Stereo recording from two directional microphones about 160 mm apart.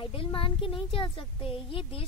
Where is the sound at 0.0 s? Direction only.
35° left (ahead or behind).